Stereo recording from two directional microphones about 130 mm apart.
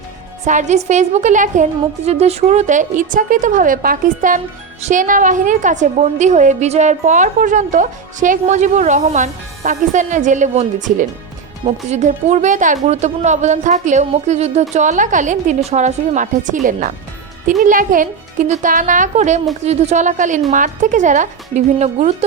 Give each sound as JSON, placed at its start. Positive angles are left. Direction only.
{"t": 0.4, "sound": "a woman's voice", "side_deg": -65}
{"t": 2.0, "sound": "a woman's voice", "side_deg": -55}
{"t": 11.6, "sound": "a woman's voice", "side_deg": -60}
{"t": 17.6, "sound": "a woman's voice", "side_deg": -90}